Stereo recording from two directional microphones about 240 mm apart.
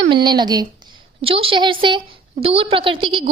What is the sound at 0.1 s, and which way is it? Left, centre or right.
A woman's voice, centre.